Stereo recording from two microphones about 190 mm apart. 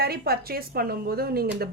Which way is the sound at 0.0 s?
55° right (ahead or behind).